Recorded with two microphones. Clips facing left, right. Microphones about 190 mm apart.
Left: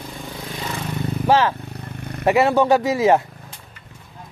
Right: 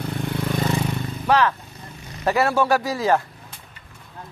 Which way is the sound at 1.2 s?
30° left (ahead or behind).